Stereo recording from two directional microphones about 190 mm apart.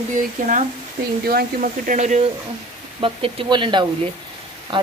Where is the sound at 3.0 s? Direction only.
25° right (ahead or behind).